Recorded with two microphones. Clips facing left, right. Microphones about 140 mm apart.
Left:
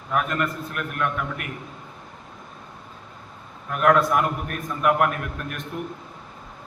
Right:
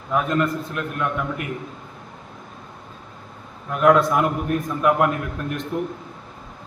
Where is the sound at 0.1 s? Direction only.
20° right (ahead or behind).